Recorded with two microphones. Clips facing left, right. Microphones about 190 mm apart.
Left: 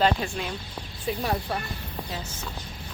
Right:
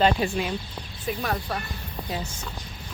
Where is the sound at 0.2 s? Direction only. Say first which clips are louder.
Right 5 dB; 10° right (ahead or behind).